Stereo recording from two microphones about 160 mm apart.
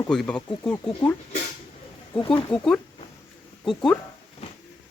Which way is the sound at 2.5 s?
5° left (ahead or behind).